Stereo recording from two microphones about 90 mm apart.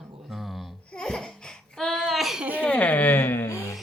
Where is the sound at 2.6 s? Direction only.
15° left (ahead or behind).